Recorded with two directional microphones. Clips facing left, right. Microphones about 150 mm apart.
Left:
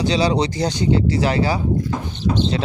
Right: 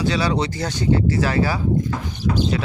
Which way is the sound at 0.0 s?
20° left (ahead or behind).